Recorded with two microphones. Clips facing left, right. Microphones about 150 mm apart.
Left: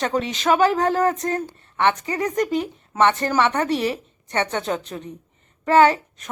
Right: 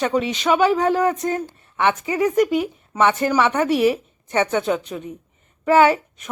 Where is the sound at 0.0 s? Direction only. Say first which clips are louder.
Right 2 dB; 5° right (ahead or behind).